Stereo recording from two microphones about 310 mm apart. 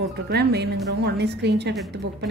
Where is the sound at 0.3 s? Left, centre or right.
Right.